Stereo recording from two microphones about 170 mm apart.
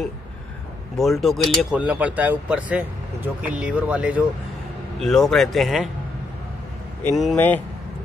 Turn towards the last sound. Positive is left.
turn(degrees=10)  # may be behind; listen again after turning